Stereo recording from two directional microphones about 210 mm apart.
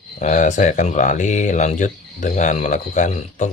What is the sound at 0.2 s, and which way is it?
Speech, 35° left (ahead or behind).